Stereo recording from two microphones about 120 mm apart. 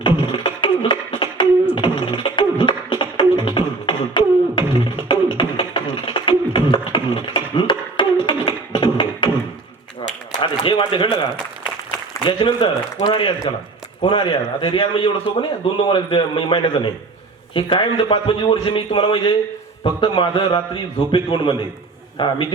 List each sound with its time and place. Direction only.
0.0 s beatboxing: 45° left (ahead or behind)
1.7 s music: 45° left (ahead or behind)
4.5 s beatboxing: 45° left (ahead or behind)
5.3 s music: 45° left (ahead or behind)
6.7 s a sound: 45° left (ahead or behind)
10.4 s a sound: 40° left (ahead or behind)
12.2 s a man's voice: 40° left (ahead or behind)